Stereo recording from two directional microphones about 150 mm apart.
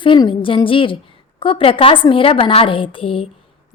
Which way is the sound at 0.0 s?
35° left (ahead or behind).